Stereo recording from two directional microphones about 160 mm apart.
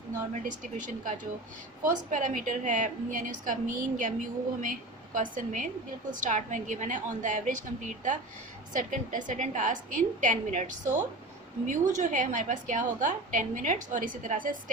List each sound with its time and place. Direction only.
0.4 s a woman's voice: 55° right (ahead or behind)